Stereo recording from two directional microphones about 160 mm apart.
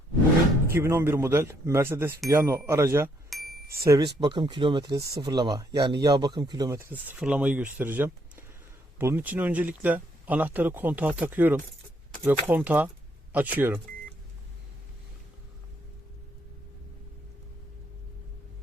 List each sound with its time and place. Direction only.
0.7 s speech: 15° right (ahead or behind)
3.3 s a sound: centre (ahead or behind)
3.8 s speech: 25° right (ahead or behind)